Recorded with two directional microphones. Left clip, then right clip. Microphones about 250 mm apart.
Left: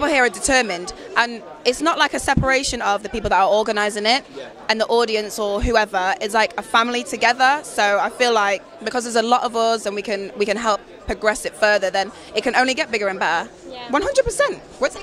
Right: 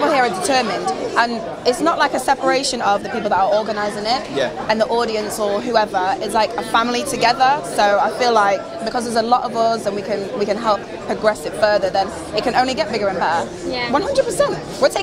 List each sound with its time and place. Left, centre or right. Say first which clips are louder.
0.0 s speech: right 2 dB; left
3.3 s speech: left 1 dB; left